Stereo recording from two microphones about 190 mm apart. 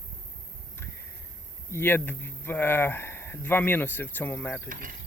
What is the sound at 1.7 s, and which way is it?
Speech, 10° left (ahead or behind).